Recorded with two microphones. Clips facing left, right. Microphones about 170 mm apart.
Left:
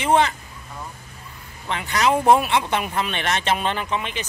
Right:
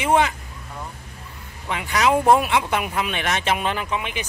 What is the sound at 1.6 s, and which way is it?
Speech, 10° right (ahead or behind).